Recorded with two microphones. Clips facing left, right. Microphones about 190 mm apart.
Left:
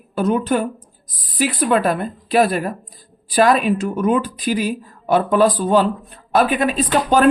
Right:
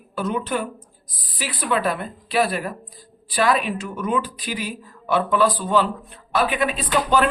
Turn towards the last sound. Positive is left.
turn(degrees=40)  # may be behind; listen again after turning